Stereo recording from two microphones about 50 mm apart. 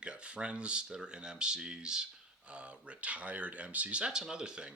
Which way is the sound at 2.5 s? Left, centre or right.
Right.